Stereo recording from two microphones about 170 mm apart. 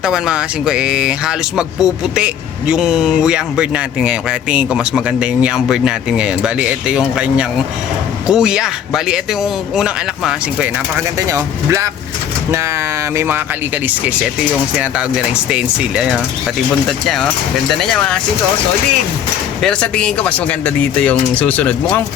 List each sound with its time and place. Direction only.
0.0 s speech: 5° right (ahead or behind)
11.2 s speech: 20° right (ahead or behind)
13.1 s speech: 10° right (ahead or behind)
15.4 s speech: 5° right (ahead or behind)
17.7 s speech: centre (ahead or behind)
19.6 s speech: 5° left (ahead or behind)